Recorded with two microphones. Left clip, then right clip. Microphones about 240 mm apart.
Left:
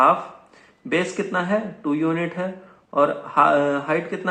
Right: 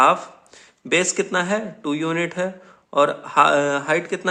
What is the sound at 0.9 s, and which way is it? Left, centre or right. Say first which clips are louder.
Speech: right 3 dB; right.